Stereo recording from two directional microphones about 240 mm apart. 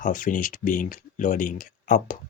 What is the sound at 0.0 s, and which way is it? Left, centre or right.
Speech, left.